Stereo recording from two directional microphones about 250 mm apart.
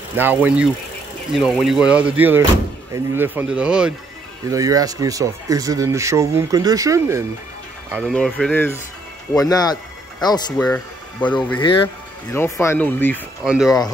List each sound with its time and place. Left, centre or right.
0.2 s speech: centre
8.1 s speech: centre
10.7 s speech: centre
11.6 s speech: centre